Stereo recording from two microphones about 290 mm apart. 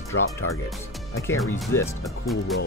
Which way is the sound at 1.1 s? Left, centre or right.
Centre.